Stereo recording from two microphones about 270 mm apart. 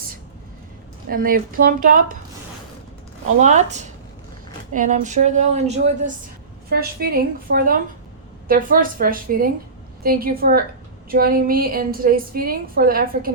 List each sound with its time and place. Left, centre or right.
1.1 s a woman's voice: right
3.4 s speech: right
6.7 s a woman's voice: right